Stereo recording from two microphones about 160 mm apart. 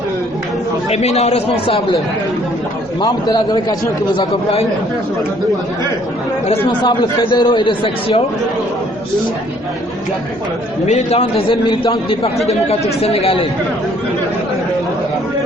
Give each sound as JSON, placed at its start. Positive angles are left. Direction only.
{"t": 0.9, "sound": "a man's voice", "side_deg": 45}
{"t": 3.0, "sound": "a man's voice", "side_deg": 20}
{"t": 6.5, "sound": "a man's voice", "side_deg": 30}
{"t": 10.8, "sound": "a man's voice", "side_deg": 45}